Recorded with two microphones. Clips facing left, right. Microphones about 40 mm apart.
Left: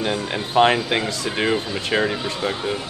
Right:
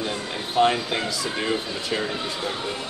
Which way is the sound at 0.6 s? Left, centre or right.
Left.